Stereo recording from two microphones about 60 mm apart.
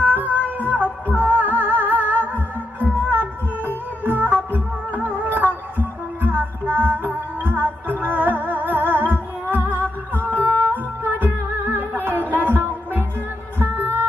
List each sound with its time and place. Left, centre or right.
0.0 s music: right